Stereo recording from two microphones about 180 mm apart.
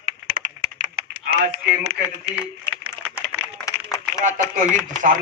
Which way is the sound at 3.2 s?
15° left (ahead or behind).